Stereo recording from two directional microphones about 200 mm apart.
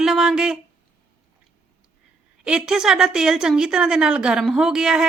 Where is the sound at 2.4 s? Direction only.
5° right (ahead or behind).